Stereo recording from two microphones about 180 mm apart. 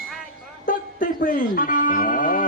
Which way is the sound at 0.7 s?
50° left (ahead or behind).